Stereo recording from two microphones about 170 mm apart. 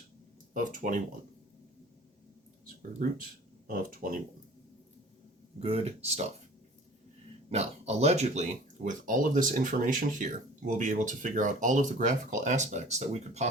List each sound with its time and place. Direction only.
0.5 s speech: 50° right (ahead or behind)
2.6 s speech: 55° right (ahead or behind)
5.5 s speech: 35° right (ahead or behind)
7.5 s speech: 40° right (ahead or behind)